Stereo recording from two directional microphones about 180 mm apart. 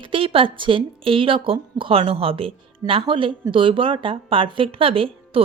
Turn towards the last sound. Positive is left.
turn(degrees=-30)  # may be behind; listen again after turning